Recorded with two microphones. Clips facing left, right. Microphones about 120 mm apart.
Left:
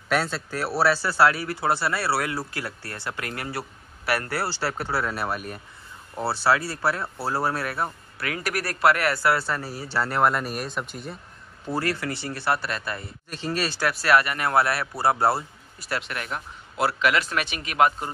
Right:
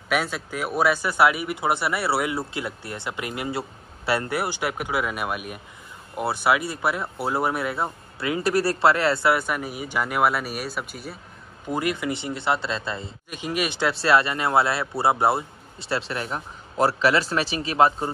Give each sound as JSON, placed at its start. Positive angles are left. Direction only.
{"t": 0.1, "sound": "speech", "side_deg": -10}
{"t": 11.7, "sound": "speech", "side_deg": -15}